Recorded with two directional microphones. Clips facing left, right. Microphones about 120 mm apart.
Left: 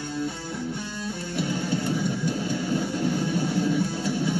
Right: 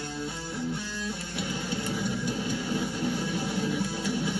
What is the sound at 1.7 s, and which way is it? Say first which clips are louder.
Vehicle: left 3 dB; centre (ahead or behind).